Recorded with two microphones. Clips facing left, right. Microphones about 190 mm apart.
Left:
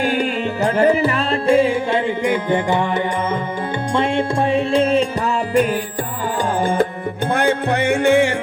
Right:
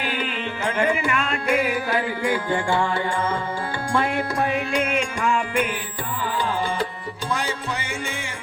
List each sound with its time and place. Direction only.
0.0 s music: 45° left (ahead or behind)
7.3 s music: 60° left (ahead or behind)